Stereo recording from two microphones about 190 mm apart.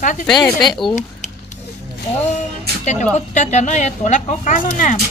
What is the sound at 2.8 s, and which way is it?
Speech, 40° left (ahead or behind).